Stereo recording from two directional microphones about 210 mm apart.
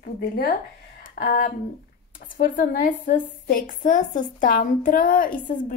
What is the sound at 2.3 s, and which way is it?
A woman's voice, 40° left (ahead or behind).